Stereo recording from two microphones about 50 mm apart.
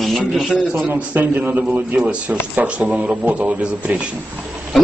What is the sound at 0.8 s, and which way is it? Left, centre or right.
A man's voice, right.